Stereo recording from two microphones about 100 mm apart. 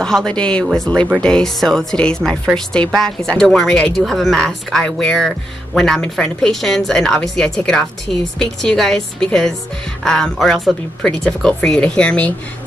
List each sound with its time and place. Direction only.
0.0 s a woman's voice: 5° left (ahead or behind)